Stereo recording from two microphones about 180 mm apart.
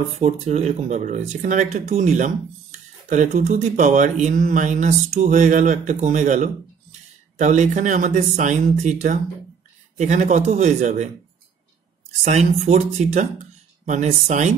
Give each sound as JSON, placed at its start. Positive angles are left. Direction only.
{"t": 0.2, "sound": "speech", "side_deg": -35}
{"t": 12.3, "sound": "speech", "side_deg": -40}